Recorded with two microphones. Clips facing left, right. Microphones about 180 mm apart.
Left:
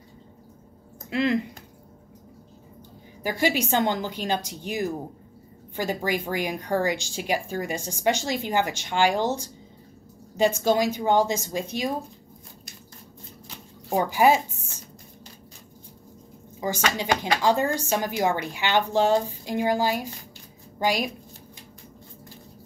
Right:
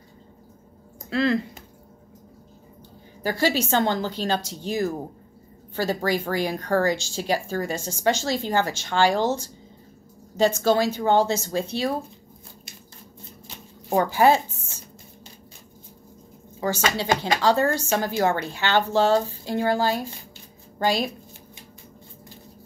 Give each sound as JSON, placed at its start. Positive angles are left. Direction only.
{"t": 1.1, "sound": "speech", "side_deg": 15}
{"t": 3.2, "sound": "speech", "side_deg": 15}
{"t": 13.9, "sound": "speech", "side_deg": 15}
{"t": 16.9, "sound": "speech", "side_deg": 15}